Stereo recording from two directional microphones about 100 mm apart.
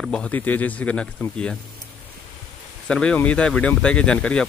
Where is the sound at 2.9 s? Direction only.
10° left (ahead or behind).